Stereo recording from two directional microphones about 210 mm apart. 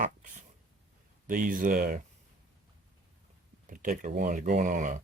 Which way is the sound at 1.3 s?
40° right (ahead or behind).